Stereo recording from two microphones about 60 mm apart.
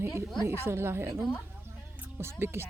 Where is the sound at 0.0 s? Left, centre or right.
Right.